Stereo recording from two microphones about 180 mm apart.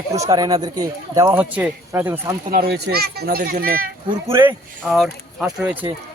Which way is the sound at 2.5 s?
60° right (ahead or behind).